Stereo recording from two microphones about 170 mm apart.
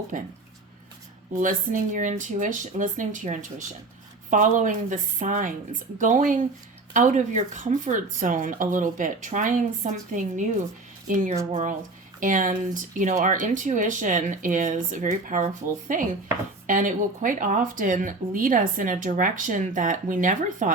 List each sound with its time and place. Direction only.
0.1 s speech: 50° right (ahead or behind)
1.3 s speech: 50° right (ahead or behind)